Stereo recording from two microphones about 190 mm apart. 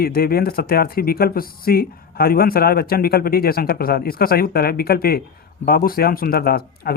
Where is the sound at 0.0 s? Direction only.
55° left (ahead or behind).